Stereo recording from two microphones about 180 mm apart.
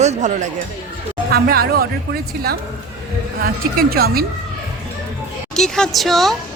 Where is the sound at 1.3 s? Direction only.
60° right (ahead or behind).